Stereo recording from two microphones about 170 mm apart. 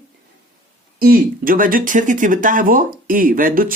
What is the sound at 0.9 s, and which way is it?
Speech, 60° right (ahead or behind).